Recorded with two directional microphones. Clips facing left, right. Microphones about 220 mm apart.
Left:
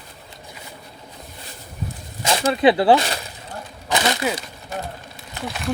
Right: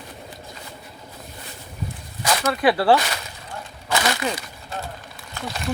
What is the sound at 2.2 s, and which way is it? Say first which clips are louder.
Speech: left 3 dB; 25° left (ahead or behind).